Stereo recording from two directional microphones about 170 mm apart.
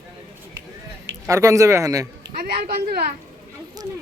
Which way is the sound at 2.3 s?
65° right (ahead or behind).